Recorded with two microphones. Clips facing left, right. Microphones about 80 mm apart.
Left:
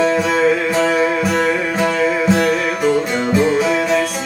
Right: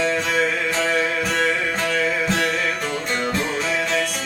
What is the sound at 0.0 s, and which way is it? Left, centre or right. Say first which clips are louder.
Music: left 6 dB; centre.